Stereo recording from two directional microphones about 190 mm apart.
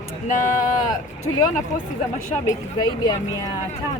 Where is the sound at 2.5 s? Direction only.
20° left (ahead or behind).